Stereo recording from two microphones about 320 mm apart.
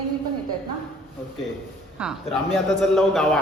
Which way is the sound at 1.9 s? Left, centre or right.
Centre.